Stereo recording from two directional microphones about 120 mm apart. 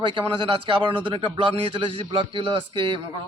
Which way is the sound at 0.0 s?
40° right (ahead or behind).